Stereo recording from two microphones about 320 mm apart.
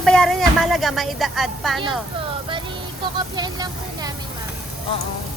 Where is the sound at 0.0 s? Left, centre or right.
Centre.